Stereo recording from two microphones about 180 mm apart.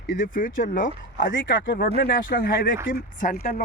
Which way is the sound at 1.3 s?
90° left.